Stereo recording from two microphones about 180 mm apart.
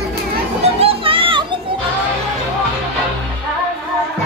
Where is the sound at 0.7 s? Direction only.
30° right (ahead or behind).